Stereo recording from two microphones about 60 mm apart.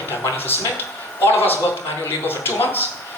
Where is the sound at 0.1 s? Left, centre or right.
Left.